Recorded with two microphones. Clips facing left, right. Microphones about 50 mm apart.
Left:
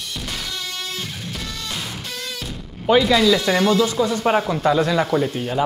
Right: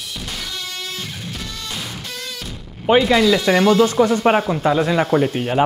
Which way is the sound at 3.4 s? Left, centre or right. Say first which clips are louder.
Right 3 dB; right.